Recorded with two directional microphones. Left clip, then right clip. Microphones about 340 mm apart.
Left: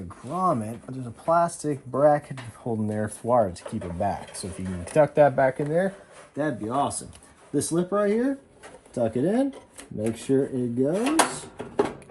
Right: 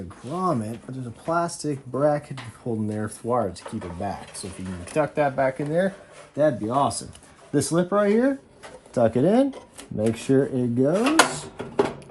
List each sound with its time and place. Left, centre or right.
0.3 s speech: centre
1.9 s speech: centre
2.1 s speech: centre
3.5 s speech: centre
4.9 s speech: centre
5.6 s speech: centre